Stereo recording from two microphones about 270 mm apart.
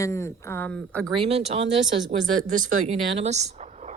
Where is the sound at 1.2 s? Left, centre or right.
Right.